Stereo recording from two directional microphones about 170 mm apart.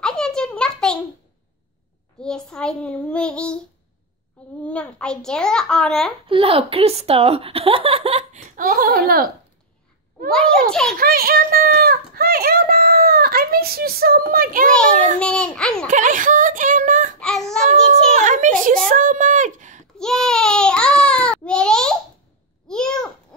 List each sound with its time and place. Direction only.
0.0 s a sound: 5° left (ahead or behind)
2.2 s a child's voice: 5° left (ahead or behind)
4.6 s a child's voice: 5° left (ahead or behind)
6.2 s speech: 35° right (ahead or behind); by 9.3 s 60° right (ahead or behind)
10.3 s a child's voice: 5° left (ahead or behind)
11.0 s a child's voice: 60° right (ahead or behind)
15.1 s a child's voice: 5° left (ahead or behind)
15.9 s a sound: 50° right (ahead or behind)
17.2 s baby cry: 5° left (ahead or behind)
18.1 s a sound: 45° right (ahead or behind)
18.9 s speech: 50° right (ahead or behind)
20.0 s baby cry: 5° left (ahead or behind)
22.7 s babbling: 5° left (ahead or behind)